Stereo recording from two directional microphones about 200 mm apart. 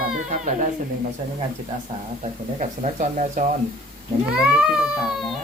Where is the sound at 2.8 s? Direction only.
40° right (ahead or behind).